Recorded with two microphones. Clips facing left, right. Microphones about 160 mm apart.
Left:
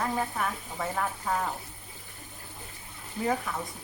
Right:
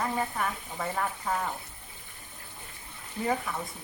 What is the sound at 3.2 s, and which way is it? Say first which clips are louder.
Speech: left 1 dB; centre (ahead or behind).